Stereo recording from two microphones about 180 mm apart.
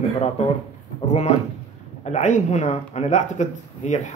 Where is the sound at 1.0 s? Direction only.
40° left (ahead or behind).